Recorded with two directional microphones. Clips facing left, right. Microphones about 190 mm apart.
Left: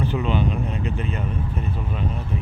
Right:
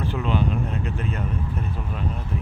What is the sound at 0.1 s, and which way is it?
Speech, centre (ahead or behind).